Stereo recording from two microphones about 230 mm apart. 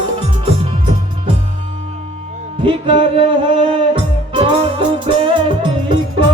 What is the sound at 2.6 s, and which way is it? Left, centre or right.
Music, right.